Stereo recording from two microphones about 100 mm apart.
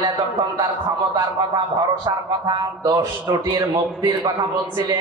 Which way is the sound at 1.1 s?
40° right (ahead or behind).